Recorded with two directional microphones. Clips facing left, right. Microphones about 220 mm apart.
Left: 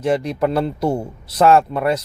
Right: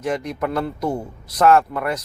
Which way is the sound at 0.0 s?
30° left (ahead or behind).